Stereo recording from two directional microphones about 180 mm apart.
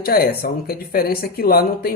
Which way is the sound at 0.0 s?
55° left (ahead or behind).